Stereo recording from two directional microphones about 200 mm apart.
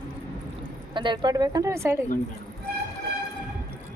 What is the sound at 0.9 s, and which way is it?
A woman's voice, 25° right (ahead or behind).